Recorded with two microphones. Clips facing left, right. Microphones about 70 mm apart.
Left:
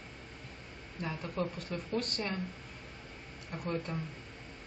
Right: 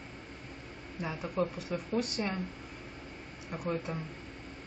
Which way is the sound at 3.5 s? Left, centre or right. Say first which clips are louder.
Right 2 dB; centre.